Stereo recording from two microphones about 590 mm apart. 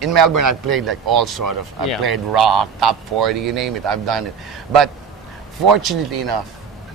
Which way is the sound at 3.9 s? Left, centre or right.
Right.